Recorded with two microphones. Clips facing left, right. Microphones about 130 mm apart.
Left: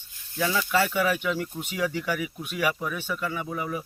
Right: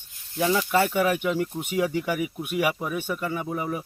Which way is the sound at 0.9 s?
50° right (ahead or behind).